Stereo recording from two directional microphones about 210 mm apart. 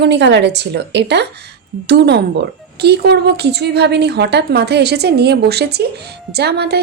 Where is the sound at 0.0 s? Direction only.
55° right (ahead or behind).